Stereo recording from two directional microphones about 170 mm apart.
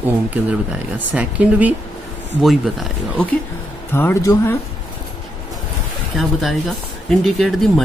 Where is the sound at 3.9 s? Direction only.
15° left (ahead or behind).